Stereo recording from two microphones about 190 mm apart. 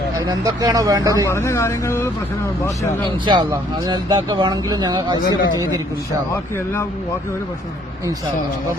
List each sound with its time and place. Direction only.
0.3 s speech: 20° right (ahead or behind)
1.3 s speech: 15° left (ahead or behind)
3.2 s speech: 20° right (ahead or behind)